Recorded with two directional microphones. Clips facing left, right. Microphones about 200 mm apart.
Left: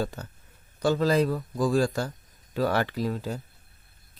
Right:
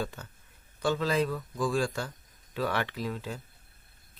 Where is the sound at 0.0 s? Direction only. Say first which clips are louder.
Left 5 dB; 40° left (ahead or behind).